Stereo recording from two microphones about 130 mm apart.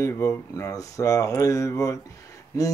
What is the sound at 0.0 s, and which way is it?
Speech, 20° left (ahead or behind).